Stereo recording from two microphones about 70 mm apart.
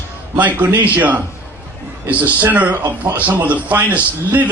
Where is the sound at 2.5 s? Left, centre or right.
Right.